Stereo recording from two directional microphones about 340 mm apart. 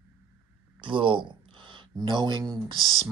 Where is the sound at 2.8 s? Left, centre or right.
Centre.